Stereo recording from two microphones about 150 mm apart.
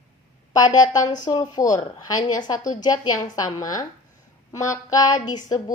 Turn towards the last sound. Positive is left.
turn(degrees=25)  # may be behind; listen again after turning